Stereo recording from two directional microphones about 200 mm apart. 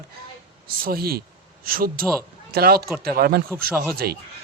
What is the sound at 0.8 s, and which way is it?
A man's voice, 50° right (ahead or behind).